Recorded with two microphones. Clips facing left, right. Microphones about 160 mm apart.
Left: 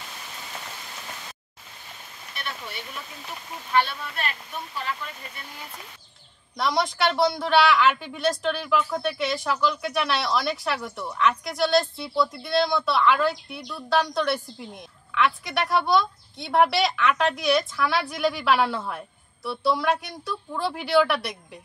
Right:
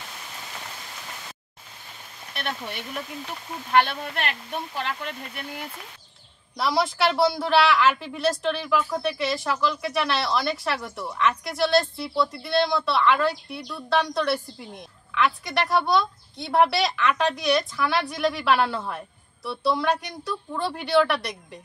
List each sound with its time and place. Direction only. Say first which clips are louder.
2.3 s speech: right 4 dB; 60° right (ahead or behind)
6.5 s a woman's voice: right 1 dB; centre (ahead or behind)